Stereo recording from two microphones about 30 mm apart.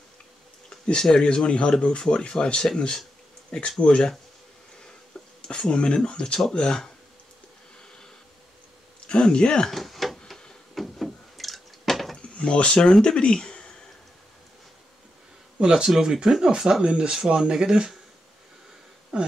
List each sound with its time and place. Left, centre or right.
1.1 s speech: left
5.1 s a sound: left
5.7 s speech: left
9.0 s speech: left
9.7 s a sound: centre
12.2 s dishes: left
13.0 s speech: left
15.6 s speech: right
16.8 s speech: right
19.1 s speech: right